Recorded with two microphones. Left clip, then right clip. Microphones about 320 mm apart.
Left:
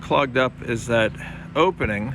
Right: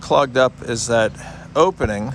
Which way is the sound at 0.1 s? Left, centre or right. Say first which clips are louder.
Right 5 dB; centre.